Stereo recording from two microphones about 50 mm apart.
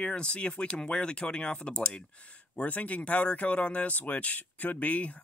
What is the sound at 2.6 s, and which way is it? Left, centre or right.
Speech, left.